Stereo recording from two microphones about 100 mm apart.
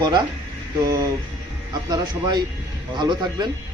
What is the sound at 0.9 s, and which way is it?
A man's voice, 35° right (ahead or behind).